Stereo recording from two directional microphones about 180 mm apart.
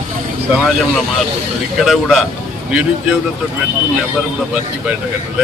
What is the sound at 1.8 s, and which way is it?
Speech, centre (ahead or behind).